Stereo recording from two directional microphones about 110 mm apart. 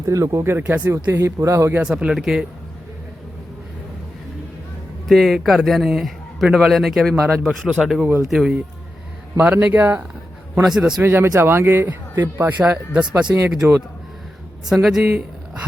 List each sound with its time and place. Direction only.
0.0 s speech: 30° right (ahead or behind)
1.8 s a man's voice: 5° right (ahead or behind)
5.0 s a man's voice: centre (ahead or behind)
9.4 s speech: 15° right (ahead or behind)
10.6 s a man's voice: 5° right (ahead or behind)
11.0 s a man's voice: 20° right (ahead or behind); by 15.0 s centre (ahead or behind)